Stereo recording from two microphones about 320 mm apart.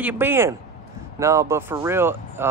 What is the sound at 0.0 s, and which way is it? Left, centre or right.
Speech, centre.